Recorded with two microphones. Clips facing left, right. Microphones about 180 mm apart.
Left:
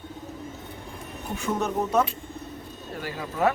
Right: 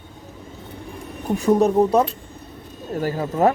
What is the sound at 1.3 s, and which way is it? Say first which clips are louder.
Speech: right 11 dB; 35° right (ahead or behind).